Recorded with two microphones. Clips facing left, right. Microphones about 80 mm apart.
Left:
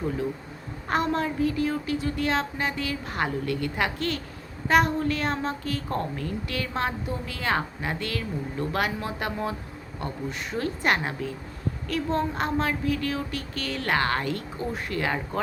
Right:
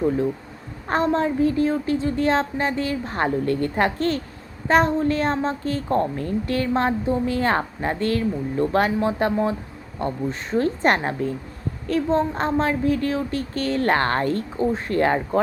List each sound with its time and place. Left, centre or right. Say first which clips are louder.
0.9 s a woman's voice: right 5 dB; right